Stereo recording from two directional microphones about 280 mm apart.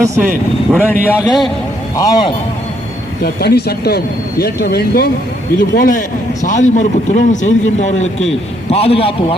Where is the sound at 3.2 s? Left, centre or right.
Left.